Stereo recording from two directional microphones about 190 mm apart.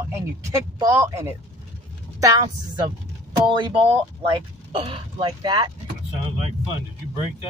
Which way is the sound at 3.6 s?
25° right (ahead or behind).